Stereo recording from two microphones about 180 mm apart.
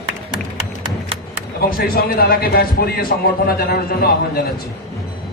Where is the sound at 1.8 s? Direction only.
55° left (ahead or behind).